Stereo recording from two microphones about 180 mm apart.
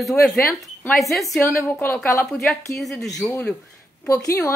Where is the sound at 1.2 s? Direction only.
15° left (ahead or behind).